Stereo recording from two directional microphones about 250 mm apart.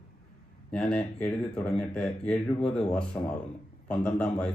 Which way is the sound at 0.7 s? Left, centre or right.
Centre.